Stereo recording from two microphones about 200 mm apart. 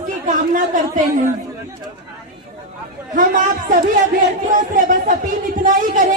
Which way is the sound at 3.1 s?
40° right (ahead or behind).